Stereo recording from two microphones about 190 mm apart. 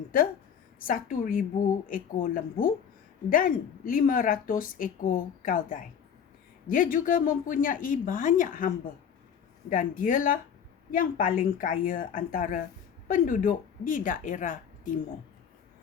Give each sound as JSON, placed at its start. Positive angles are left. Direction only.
{"t": 0.9, "sound": "a woman's voice", "side_deg": 45}